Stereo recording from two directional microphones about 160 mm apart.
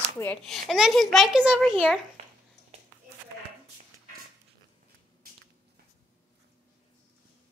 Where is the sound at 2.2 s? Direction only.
40° right (ahead or behind).